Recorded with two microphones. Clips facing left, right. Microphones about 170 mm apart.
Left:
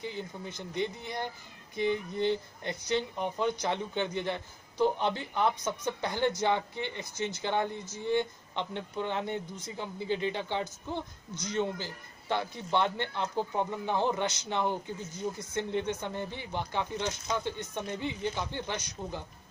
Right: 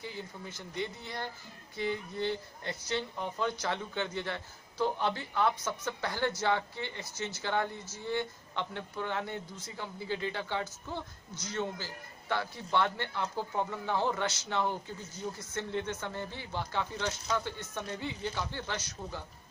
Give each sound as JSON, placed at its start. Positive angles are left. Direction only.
{"t": 0.0, "sound": "speech", "side_deg": 20}